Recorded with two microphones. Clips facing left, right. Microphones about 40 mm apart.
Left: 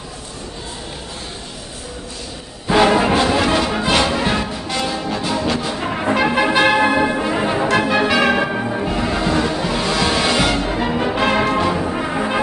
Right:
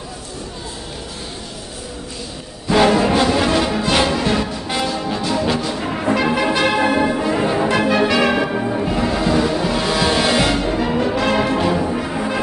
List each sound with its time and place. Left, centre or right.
2.7 s music: centre
5.6 s brass instrument: centre
7.8 s music: centre